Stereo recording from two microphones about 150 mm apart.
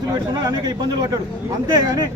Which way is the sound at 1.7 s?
25° right (ahead or behind).